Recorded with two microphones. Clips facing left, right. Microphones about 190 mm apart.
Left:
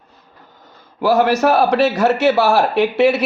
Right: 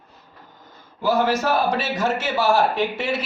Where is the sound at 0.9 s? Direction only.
75° left (ahead or behind).